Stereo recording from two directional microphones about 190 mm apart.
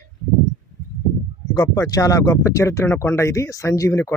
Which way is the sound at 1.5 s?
20° left (ahead or behind).